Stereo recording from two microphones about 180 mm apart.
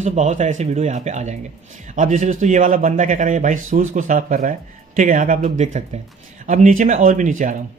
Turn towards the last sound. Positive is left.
turn(degrees=-45)  # may be behind; listen again after turning